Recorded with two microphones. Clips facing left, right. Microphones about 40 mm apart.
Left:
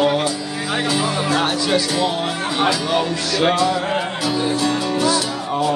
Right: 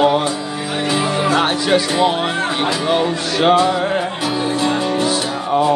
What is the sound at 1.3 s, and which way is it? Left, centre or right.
Music, right.